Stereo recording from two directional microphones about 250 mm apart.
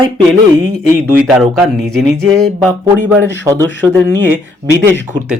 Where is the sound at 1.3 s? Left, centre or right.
Centre.